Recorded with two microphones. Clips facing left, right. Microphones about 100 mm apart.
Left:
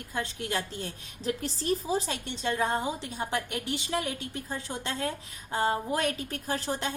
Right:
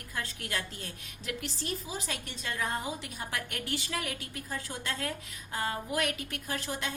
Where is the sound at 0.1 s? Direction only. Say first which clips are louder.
Left 5 dB; 25° left (ahead or behind).